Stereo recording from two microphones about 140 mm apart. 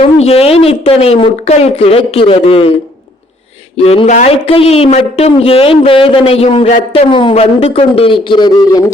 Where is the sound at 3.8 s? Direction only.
45° left (ahead or behind).